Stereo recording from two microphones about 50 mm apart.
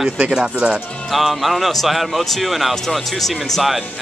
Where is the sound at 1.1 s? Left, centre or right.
Centre.